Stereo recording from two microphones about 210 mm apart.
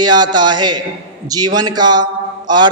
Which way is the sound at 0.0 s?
20° right (ahead or behind).